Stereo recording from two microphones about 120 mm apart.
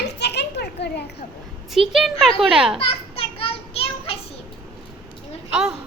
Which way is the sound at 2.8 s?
55° left (ahead or behind).